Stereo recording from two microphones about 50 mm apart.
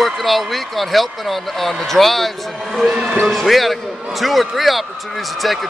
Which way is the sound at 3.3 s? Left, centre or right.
Centre.